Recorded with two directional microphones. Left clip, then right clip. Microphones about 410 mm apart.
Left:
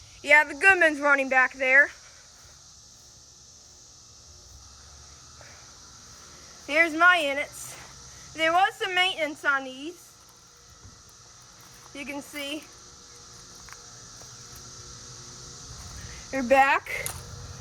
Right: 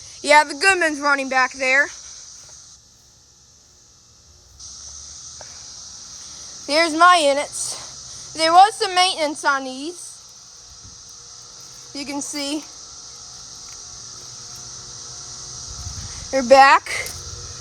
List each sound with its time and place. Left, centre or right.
0.3 s speech: centre
6.7 s speech: centre
11.9 s speech: centre
16.3 s speech: centre